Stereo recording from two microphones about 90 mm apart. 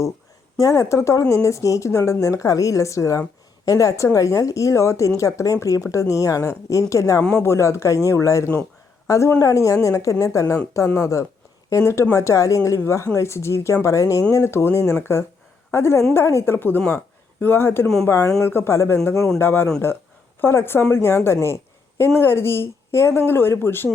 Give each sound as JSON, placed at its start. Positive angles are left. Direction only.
{"t": 0.6, "sound": "a woman's voice", "side_deg": 35}
{"t": 7.2, "sound": "speech", "side_deg": 10}
{"t": 7.4, "sound": "a woman's voice", "side_deg": 30}
{"t": 17.8, "sound": "speech", "side_deg": 5}
{"t": 18.1, "sound": "a woman's voice", "side_deg": 35}